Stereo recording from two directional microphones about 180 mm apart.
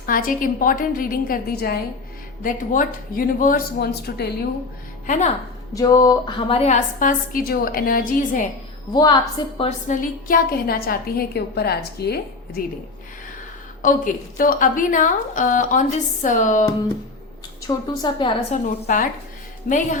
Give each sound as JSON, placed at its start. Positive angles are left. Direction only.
{"t": 0.0, "sound": "a woman's voice", "side_deg": 50}
{"t": 5.0, "sound": "a woman's voice", "side_deg": 45}
{"t": 5.7, "sound": "a woman's voice", "side_deg": 20}
{"t": 8.9, "sound": "a woman's voice", "side_deg": 20}
{"t": 9.6, "sound": "a woman's voice", "side_deg": 45}
{"t": 13.8, "sound": "a woman's voice", "side_deg": 50}
{"t": 17.7, "sound": "a woman's voice", "side_deg": 25}
{"t": 18.5, "sound": "a woman's voice", "side_deg": 45}